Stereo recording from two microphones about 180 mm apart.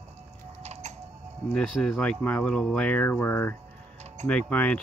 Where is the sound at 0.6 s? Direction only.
40° right (ahead or behind).